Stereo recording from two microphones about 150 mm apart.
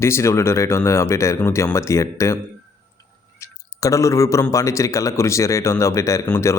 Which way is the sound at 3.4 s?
20° left (ahead or behind).